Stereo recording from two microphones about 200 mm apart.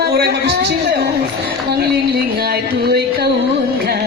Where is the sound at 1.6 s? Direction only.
50° right (ahead or behind).